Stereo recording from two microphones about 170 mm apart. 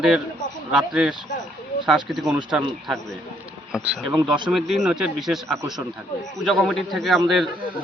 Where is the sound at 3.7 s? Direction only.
5° right (ahead or behind).